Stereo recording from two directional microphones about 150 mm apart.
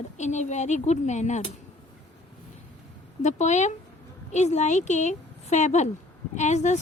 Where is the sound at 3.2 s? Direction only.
50° left (ahead or behind).